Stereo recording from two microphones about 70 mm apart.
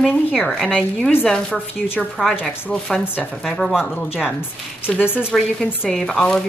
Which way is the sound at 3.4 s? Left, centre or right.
Centre.